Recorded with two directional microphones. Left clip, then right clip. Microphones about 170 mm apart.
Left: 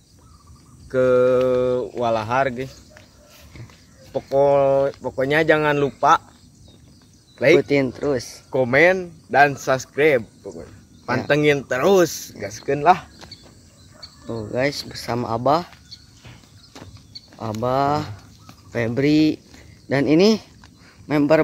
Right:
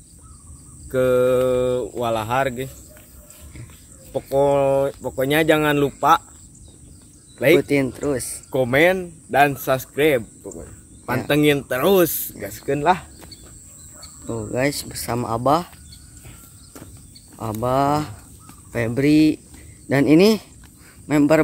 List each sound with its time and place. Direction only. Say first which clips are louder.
0.8 s speech: left 1 dB; 5° right (ahead or behind)
4.3 s speech: left 1 dB; 10° right (ahead or behind)
7.3 s speech: left 1 dB; 5° right (ahead or behind)
7.6 s speech: left 1 dB; 10° left (ahead or behind)
8.5 s speech: left 1 dB; 5° right (ahead or behind)
14.2 s speech: even; 20° right (ahead or behind)
17.4 s speech: right 1 dB; 20° right (ahead or behind)
18.7 s speech: right 1 dB; centre (ahead or behind)
19.9 s speech: right 1 dB; 20° right (ahead or behind)
21.1 s speech: even; centre (ahead or behind)